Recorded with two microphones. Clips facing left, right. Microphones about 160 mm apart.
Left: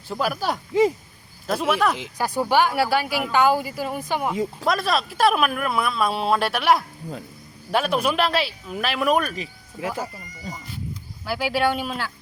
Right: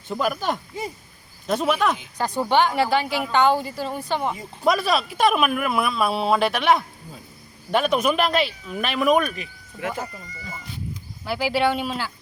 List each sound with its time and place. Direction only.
0.1 s speech: 5° left (ahead or behind)
0.7 s speech: 90° left
1.5 s speech: 5° left (ahead or behind)
4.6 s speech: centre (ahead or behind)
9.3 s speech: 35° left (ahead or behind)
11.3 s speech: centre (ahead or behind)